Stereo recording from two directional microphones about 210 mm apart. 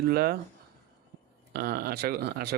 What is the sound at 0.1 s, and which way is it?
Speech, 45° right (ahead or behind).